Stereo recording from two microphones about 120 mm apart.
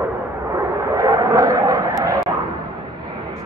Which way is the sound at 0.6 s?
25° right (ahead or behind).